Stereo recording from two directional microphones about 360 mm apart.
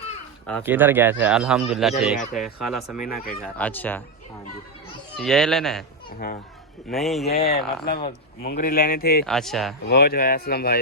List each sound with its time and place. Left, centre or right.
0.4 s speech: centre
5.1 s speech: centre
6.1 s speech: left
6.9 s speech: centre
7.3 s speech: left
9.2 s speech: centre
9.8 s speech: left